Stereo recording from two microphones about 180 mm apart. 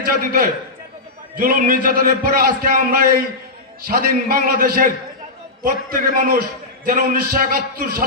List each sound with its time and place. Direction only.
0.0 s a man's voice: 50° right (ahead or behind)